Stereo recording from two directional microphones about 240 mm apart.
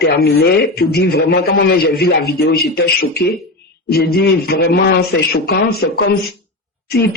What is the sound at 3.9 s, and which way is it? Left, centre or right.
A man's voice, left.